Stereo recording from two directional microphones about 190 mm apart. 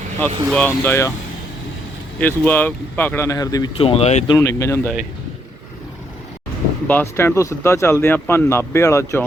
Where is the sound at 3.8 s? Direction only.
30° left (ahead or behind).